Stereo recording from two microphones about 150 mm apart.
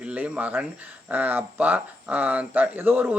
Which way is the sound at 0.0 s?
10° right (ahead or behind).